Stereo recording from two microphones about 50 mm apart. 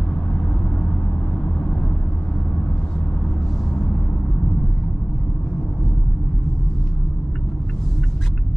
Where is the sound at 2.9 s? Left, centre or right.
Centre.